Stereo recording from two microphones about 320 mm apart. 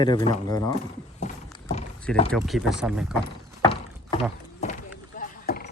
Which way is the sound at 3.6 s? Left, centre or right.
Centre.